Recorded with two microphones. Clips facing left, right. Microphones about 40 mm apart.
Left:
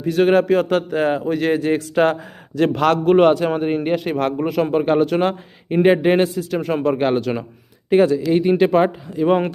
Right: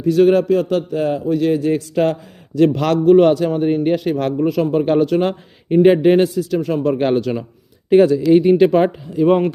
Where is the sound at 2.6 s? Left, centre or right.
Centre.